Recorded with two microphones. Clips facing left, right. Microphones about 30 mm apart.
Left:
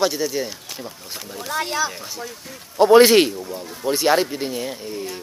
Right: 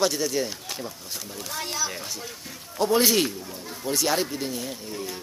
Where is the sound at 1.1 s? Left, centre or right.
Centre.